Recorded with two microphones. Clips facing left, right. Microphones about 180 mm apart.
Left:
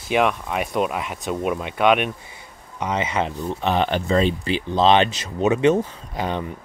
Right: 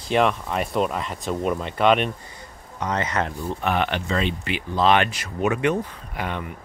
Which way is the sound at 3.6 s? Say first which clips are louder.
Left 3 dB; 30° left (ahead or behind).